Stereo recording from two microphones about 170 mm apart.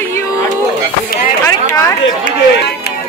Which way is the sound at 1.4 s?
15° left (ahead or behind).